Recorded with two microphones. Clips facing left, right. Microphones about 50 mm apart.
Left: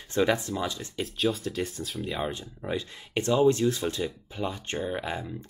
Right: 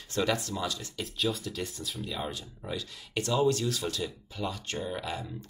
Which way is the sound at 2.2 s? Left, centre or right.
Left.